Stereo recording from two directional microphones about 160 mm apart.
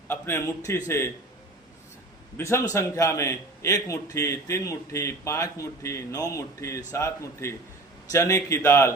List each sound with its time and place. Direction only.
0.1 s a man's voice: 15° left (ahead or behind)
2.4 s a man's voice: 15° left (ahead or behind)